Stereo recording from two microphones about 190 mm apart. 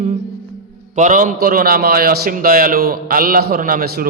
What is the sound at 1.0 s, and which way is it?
A man's voice, 40° right (ahead or behind).